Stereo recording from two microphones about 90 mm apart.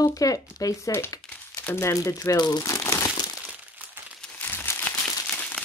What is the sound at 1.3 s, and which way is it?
Crumpling, 20° left (ahead or behind).